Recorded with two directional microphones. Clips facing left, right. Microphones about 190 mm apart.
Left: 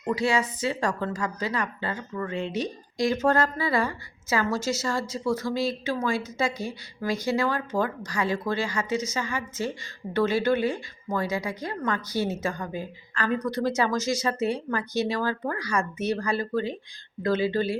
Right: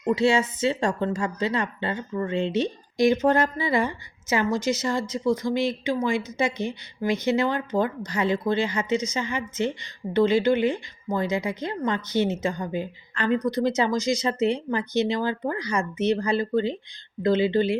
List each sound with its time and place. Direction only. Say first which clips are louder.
0.1 s speech: right 4 dB; 25° right (ahead or behind)